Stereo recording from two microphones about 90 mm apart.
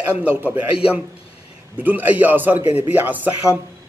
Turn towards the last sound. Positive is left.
turn(degrees=-20)  # may be behind; listen again after turning